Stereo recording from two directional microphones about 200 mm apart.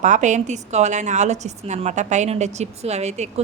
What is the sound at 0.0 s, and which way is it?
A woman's voice, 35° right (ahead or behind).